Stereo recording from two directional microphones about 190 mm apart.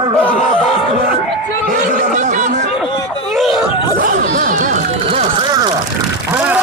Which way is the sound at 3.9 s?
50° right (ahead or behind).